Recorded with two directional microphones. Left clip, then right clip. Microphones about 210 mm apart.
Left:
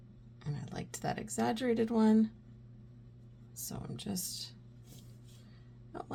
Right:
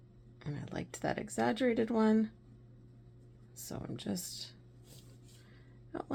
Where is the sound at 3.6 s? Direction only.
30° right (ahead or behind).